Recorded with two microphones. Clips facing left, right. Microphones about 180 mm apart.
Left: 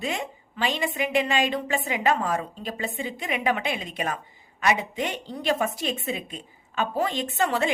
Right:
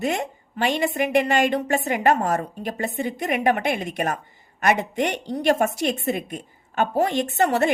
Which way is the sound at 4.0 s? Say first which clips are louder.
Right 4 dB; 45° right (ahead or behind).